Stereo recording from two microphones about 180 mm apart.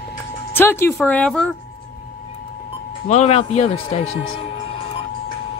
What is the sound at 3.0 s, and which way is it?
Speech, 35° left (ahead or behind).